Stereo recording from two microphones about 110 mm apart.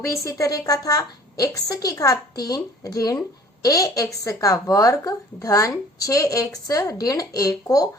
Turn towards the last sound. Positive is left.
turn(degrees=35)  # may be behind; listen again after turning